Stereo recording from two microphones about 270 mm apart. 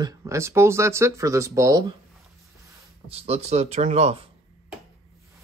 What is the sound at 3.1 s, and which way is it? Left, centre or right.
Speech, right.